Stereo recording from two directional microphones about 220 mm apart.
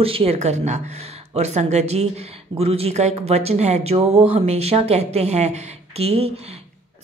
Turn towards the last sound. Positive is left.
turn(degrees=-30)  # may be behind; listen again after turning